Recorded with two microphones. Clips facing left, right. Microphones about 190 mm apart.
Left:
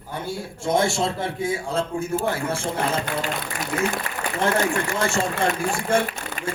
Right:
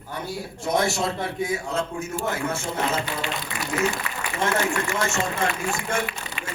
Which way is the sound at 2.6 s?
45° left (ahead or behind).